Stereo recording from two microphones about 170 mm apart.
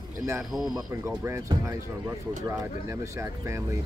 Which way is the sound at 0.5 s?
5° right (ahead or behind).